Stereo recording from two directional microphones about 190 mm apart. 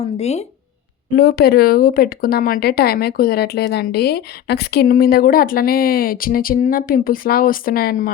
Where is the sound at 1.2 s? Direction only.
50° left (ahead or behind).